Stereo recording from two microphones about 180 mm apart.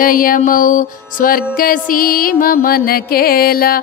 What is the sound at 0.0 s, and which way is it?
Music, 50° left (ahead or behind).